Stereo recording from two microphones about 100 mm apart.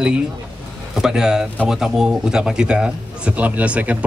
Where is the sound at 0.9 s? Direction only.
5° right (ahead or behind).